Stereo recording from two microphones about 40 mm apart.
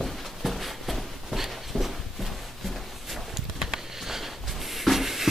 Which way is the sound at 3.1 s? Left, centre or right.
Centre.